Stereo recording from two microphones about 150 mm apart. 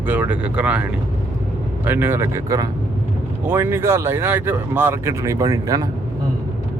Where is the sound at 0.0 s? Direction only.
10° right (ahead or behind).